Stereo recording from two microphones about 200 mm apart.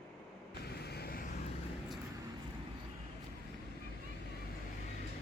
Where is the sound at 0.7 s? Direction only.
55° left (ahead or behind).